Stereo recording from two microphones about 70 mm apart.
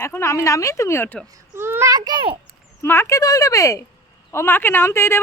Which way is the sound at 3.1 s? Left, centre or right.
Left.